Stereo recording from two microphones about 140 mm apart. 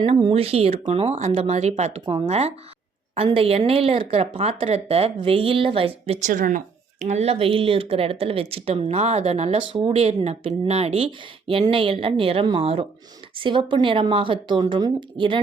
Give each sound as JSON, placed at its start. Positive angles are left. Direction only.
{"t": 0.2, "sound": "speech", "side_deg": -40}
{"t": 6.1, "sound": "speech", "side_deg": -70}
{"t": 7.0, "sound": "speech", "side_deg": -55}